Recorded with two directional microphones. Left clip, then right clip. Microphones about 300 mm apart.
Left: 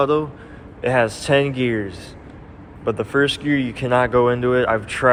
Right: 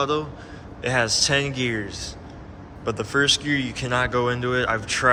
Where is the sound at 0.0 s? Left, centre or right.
Centre.